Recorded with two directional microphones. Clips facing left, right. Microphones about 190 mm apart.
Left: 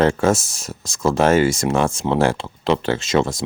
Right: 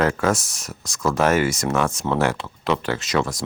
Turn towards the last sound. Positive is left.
turn(degrees=25)  # may be behind; listen again after turning